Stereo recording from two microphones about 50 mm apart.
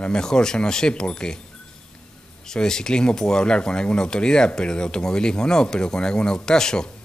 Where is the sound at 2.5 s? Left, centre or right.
Centre.